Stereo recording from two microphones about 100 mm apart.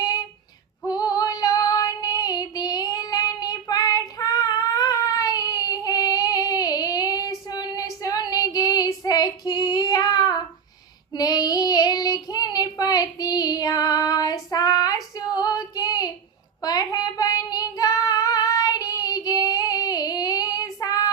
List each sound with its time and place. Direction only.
0.9 s female singing: 40° left (ahead or behind)
8.0 s child singing: 40° left (ahead or behind)
15.3 s female singing: 40° left (ahead or behind)
16.6 s child singing: 40° left (ahead or behind)